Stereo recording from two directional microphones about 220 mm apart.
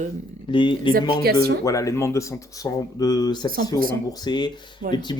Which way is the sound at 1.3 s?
45° right (ahead or behind).